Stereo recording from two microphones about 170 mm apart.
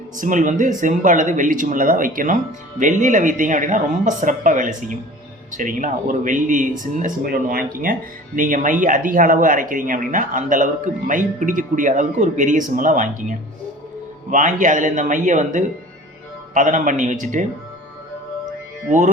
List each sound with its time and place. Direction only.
0.2 s speech: 50° right (ahead or behind)
18.9 s speech: 50° right (ahead or behind)